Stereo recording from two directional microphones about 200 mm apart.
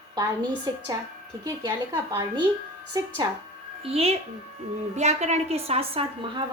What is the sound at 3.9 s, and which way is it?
A woman's voice, 30° right (ahead or behind).